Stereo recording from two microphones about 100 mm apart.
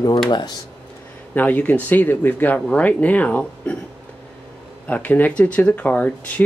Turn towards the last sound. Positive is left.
turn(degrees=15)  # may be behind; listen again after turning